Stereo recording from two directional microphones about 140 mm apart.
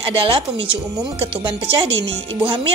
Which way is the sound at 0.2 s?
40° right (ahead or behind).